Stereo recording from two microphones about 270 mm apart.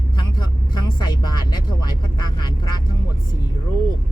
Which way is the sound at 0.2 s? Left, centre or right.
Centre.